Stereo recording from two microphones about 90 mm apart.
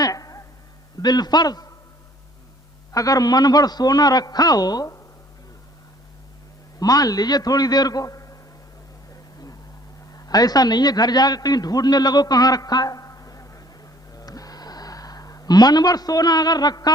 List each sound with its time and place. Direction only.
0.0 s a sound: 40° left (ahead or behind)
1.0 s a man's voice: 50° left (ahead or behind)
2.9 s a man's voice: 40° left (ahead or behind)
6.7 s a man's voice: 45° left (ahead or behind)
10.2 s a man's voice: 45° left (ahead or behind)